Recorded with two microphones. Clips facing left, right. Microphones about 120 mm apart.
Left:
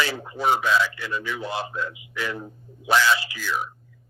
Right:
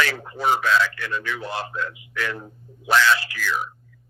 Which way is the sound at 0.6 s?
15° left (ahead or behind).